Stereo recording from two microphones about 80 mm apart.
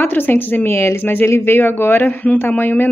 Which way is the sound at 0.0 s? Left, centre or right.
Left.